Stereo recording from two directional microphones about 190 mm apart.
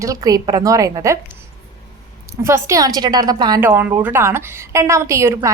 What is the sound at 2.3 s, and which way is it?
A woman's voice, 15° right (ahead or behind).